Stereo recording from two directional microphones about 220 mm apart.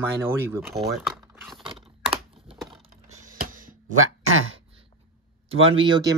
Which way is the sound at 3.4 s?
40° right (ahead or behind).